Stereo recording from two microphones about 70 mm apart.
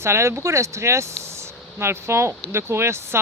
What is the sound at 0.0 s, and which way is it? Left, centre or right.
Speech, right.